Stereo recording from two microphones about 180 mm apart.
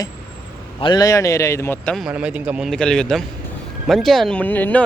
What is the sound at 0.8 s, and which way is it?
A man's voice, 25° left (ahead or behind).